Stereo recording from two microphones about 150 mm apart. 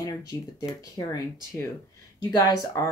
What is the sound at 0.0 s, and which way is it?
Speech, 25° left (ahead or behind).